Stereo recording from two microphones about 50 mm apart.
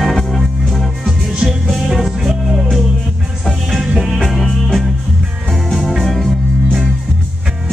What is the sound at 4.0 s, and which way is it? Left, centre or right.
Music, centre.